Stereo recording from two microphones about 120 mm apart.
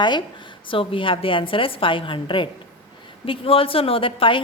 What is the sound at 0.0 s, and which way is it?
A woman's voice, 40° left (ahead or behind).